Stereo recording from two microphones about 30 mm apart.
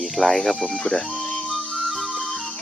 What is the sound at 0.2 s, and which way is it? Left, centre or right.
Speech, centre.